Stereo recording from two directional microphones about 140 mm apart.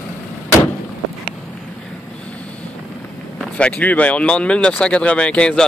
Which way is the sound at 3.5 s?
10° left (ahead or behind).